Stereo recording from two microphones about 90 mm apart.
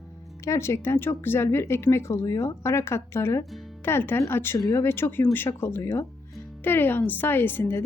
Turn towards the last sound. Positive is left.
turn(degrees=25)  # may be behind; listen again after turning